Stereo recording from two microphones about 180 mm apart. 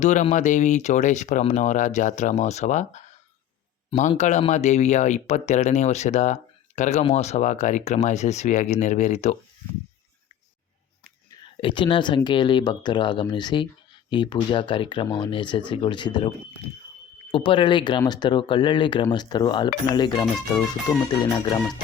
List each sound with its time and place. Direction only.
0.0 s speech: 40° left (ahead or behind)
11.6 s speech: 25° left (ahead or behind)
17.3 s speech: 25° left (ahead or behind)